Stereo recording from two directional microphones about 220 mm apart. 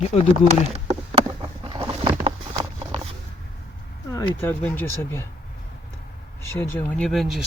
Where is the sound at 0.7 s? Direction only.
30° right (ahead or behind).